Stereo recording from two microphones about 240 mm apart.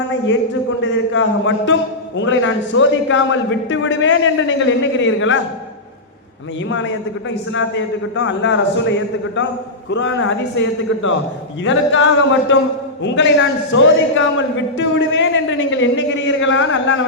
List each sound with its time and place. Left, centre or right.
0.8 s a man's voice: left
6.7 s a man's voice: left